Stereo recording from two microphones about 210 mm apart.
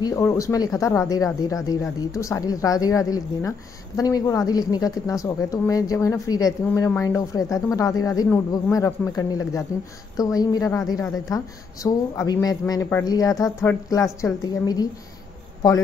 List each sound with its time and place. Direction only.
0.0 s speech: 15° left (ahead or behind)